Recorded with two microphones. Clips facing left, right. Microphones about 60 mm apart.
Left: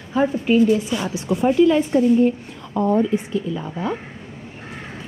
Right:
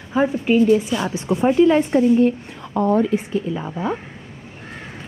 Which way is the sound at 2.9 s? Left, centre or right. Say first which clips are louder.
Right 1 dB; right.